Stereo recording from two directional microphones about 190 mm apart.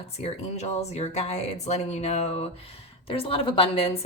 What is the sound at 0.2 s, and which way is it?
Speech, 35° left (ahead or behind).